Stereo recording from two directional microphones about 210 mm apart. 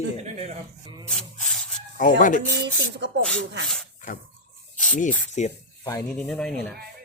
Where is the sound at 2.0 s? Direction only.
40° left (ahead or behind).